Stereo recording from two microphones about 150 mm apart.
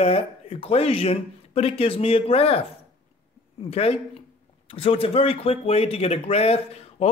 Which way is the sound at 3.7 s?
40° left (ahead or behind).